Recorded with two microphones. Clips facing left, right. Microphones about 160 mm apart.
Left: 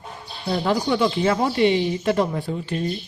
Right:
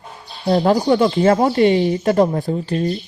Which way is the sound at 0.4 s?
45° right (ahead or behind).